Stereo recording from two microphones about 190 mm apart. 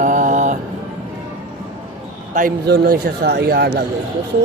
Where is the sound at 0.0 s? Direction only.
45° right (ahead or behind).